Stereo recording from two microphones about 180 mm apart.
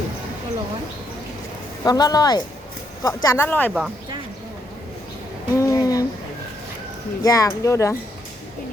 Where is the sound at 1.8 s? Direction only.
20° left (ahead or behind).